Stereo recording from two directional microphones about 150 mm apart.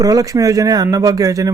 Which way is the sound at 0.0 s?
25° right (ahead or behind).